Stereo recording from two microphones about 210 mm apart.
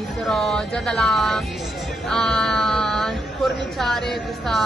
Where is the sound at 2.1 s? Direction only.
5° left (ahead or behind).